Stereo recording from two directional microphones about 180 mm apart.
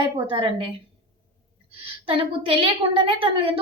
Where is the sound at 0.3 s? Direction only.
30° right (ahead or behind).